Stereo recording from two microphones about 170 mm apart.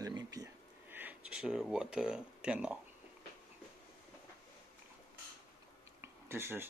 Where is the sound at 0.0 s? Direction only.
20° right (ahead or behind); by 2.8 s 5° right (ahead or behind).